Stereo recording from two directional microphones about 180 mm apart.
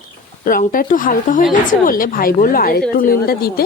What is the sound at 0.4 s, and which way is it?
Speech, 50° left (ahead or behind).